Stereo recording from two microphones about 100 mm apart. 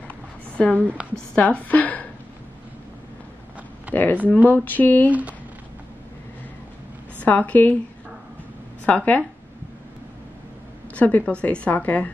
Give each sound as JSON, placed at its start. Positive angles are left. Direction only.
{"t": 0.1, "sound": "a sound", "side_deg": 10}
{"t": 0.7, "sound": "a woman's voice", "side_deg": -15}
{"t": 1.3, "sound": "a woman's voice", "side_deg": 15}
{"t": 3.9, "sound": "a woman's voice", "side_deg": 15}
{"t": 7.2, "sound": "a woman's voice", "side_deg": 15}
{"t": 8.8, "sound": "a woman's voice", "side_deg": 15}
{"t": 11.0, "sound": "a woman's voice", "side_deg": 15}